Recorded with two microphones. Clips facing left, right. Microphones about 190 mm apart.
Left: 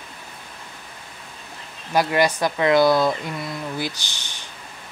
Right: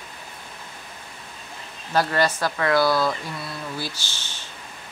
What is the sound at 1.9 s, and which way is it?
Speech, 15° left (ahead or behind).